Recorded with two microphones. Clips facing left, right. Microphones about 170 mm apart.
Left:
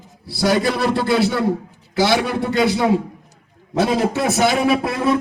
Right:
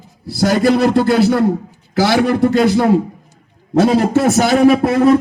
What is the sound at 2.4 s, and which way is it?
Music, 40° right (ahead or behind).